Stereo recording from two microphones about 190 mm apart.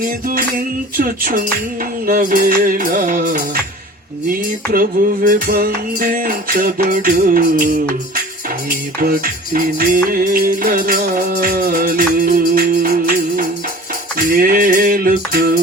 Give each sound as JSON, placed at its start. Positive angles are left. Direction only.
{"t": 0.0, "sound": "music", "side_deg": -50}